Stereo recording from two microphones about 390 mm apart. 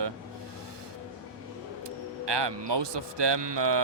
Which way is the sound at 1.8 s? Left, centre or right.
Right.